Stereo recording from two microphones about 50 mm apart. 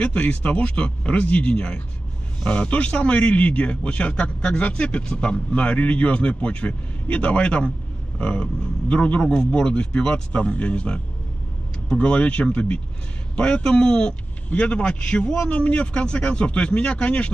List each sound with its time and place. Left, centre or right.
0.0 s a man's voice: left